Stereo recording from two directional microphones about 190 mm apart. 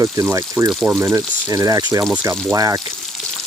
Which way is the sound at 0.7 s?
Centre (ahead or behind).